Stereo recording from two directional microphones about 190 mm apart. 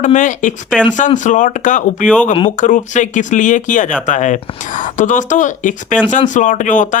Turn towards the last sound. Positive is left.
turn(degrees=40)  # may be behind; listen again after turning